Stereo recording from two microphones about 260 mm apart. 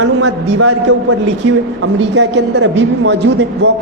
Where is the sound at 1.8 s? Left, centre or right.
Right.